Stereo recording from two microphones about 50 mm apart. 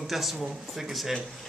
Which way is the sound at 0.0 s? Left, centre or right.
Centre.